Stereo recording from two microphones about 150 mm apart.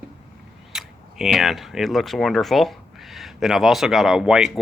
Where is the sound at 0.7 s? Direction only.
Centre (ahead or behind).